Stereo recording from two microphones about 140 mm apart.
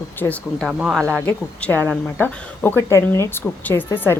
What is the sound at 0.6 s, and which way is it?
A man's voice, 5° right (ahead or behind).